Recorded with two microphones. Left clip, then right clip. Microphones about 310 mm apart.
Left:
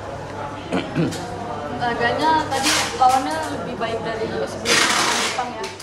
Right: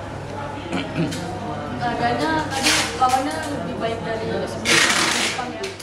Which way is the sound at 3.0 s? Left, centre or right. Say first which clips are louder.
Left 3 dB; left.